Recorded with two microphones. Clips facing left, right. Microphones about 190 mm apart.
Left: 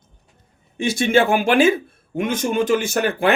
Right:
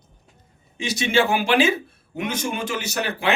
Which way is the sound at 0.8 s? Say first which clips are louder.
Left 4 dB; 50° left (ahead or behind).